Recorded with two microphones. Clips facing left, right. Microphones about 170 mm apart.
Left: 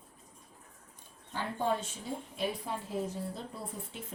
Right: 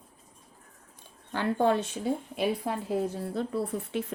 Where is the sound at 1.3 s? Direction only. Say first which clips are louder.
Right 7 dB; 75° right (ahead or behind).